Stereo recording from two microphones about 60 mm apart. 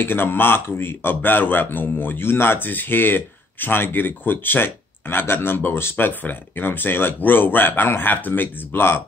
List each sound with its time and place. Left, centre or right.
0.0 s speech: left